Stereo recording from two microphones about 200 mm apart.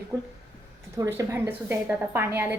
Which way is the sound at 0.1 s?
10° right (ahead or behind).